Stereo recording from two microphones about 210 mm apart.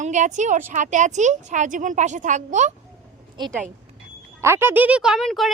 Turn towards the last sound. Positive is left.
turn(degrees=0)  # may be behind; listen again after turning